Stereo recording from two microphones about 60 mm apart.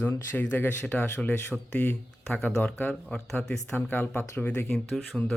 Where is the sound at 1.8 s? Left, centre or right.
Left.